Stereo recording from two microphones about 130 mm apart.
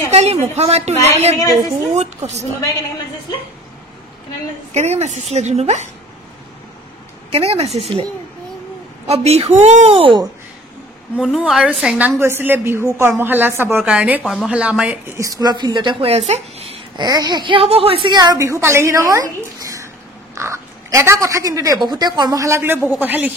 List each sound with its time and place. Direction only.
0.1 s speech: 55° right (ahead or behind)
4.7 s speech: 60° right (ahead or behind)
7.2 s a woman's voice: 50° right (ahead or behind)
11.3 s a woman's voice: 5° right (ahead or behind)
12.2 s a woman's voice: 15° right (ahead or behind)
15.1 s speech: 25° right (ahead or behind); by 16.8 s 50° right (ahead or behind)
16.9 s speech: 30° right (ahead or behind)
18.1 s speech: 30° right (ahead or behind); by 23.3 s 15° right (ahead or behind)